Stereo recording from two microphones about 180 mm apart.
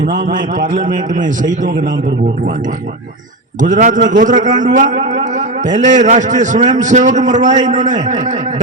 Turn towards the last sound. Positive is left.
turn(degrees=-45)  # may be behind; listen again after turning